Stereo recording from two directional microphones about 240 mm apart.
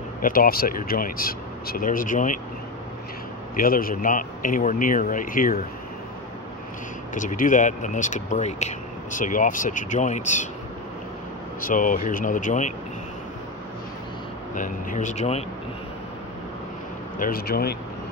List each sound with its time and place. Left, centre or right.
0.2 s speech: left
3.5 s speech: left
7.2 s speech: left
11.6 s speech: left
14.5 s speech: left
17.2 s speech: left